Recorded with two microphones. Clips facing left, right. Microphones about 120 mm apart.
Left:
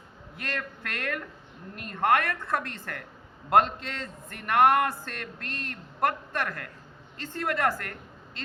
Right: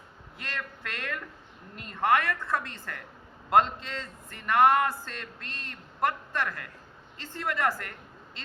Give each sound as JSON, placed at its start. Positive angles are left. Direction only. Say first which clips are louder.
{"t": 0.3, "sound": "a man's voice", "louder": "left 3 dB", "side_deg": 55}